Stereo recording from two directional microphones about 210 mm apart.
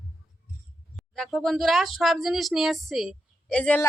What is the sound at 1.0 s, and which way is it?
Speech, centre (ahead or behind).